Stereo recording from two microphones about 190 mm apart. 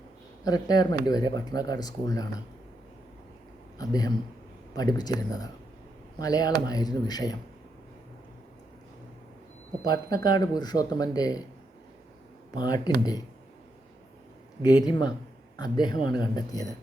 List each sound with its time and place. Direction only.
0.4 s speech: 20° left (ahead or behind)
3.8 s a man's voice: 20° left (ahead or behind)
9.8 s speech: 20° left (ahead or behind)
12.5 s speech: 20° left (ahead or behind)
14.6 s speech: 20° left (ahead or behind)